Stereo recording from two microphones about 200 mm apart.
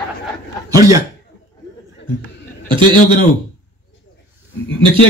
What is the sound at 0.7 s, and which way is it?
Speech, 15° right (ahead or behind).